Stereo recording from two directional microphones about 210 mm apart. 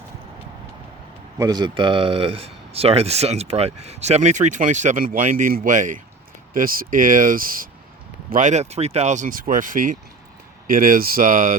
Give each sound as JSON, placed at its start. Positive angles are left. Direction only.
{"t": 1.4, "sound": "speech", "side_deg": -20}